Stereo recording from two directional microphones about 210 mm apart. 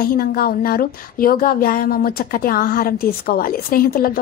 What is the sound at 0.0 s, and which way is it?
Speech, 45° left (ahead or behind).